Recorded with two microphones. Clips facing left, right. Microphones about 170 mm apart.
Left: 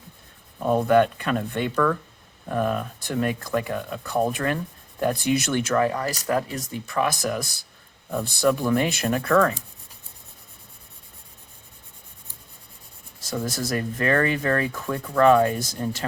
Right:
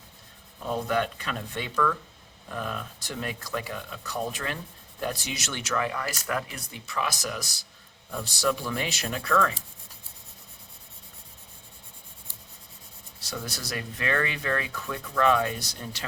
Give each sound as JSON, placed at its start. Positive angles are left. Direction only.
{"t": 0.6, "sound": "speech", "side_deg": 55}
{"t": 13.1, "sound": "speech", "side_deg": 45}